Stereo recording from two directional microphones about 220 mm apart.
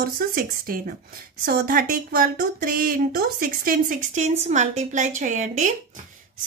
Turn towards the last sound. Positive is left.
turn(degrees=-35)  # may be behind; listen again after turning